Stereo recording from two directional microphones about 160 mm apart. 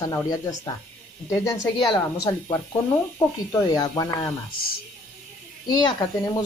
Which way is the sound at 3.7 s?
20° left (ahead or behind).